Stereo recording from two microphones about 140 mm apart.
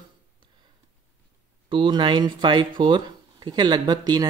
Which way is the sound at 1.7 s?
35° right (ahead or behind).